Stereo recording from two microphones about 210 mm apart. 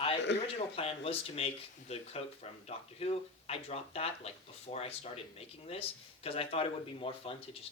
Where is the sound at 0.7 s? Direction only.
25° left (ahead or behind).